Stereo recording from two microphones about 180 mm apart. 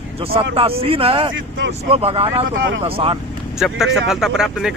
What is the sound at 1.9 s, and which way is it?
Speech, 30° right (ahead or behind).